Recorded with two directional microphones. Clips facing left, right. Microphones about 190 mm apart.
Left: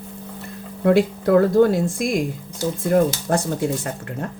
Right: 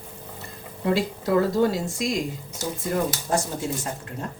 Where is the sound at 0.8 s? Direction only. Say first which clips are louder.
Left 7 dB; 55° left (ahead or behind).